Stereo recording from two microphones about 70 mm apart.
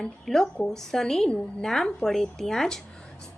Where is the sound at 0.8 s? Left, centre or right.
Centre.